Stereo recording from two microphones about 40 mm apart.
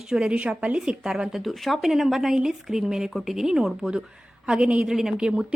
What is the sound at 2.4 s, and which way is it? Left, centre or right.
A woman's voice, centre.